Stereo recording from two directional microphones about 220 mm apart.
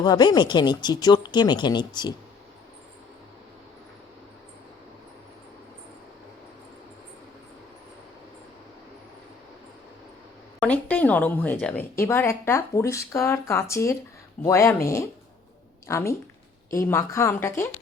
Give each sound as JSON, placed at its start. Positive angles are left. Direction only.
{"t": 0.0, "sound": "speech", "side_deg": 20}
{"t": 10.6, "sound": "a woman's voice", "side_deg": 5}